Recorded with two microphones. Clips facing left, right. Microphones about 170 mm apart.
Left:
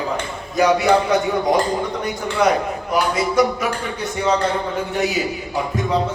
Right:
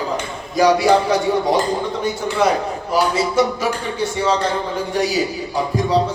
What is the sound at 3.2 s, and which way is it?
Music, 30° right (ahead or behind).